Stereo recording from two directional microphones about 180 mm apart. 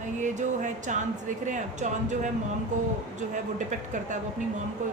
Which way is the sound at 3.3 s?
45° right (ahead or behind).